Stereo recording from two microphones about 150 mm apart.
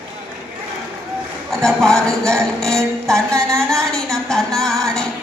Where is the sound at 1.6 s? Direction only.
5° left (ahead or behind).